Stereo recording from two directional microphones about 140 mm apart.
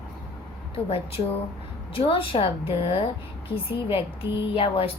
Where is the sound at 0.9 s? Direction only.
40° left (ahead or behind).